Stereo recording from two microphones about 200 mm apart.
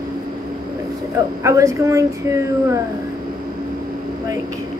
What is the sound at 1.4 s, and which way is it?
Speech, 15° right (ahead or behind).